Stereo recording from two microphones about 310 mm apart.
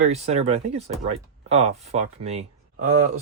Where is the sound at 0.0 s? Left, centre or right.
Right.